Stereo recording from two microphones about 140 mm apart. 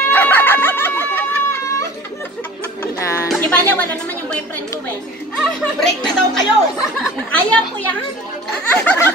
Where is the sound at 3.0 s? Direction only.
20° left (ahead or behind).